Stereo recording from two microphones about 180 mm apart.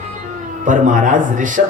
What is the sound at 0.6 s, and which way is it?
Speech, 45° right (ahead or behind).